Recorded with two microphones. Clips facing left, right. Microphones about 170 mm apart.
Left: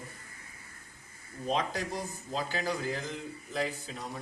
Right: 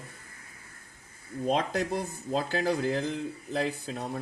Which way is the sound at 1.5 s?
60° right (ahead or behind).